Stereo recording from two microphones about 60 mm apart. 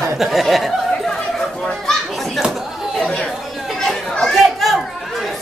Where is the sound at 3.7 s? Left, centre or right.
Centre.